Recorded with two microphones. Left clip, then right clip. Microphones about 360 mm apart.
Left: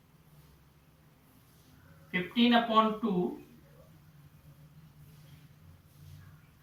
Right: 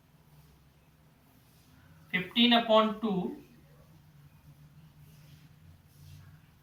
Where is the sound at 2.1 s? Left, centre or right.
Centre.